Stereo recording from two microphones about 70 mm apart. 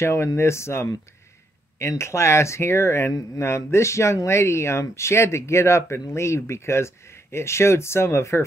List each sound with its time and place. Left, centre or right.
0.0 s speech: left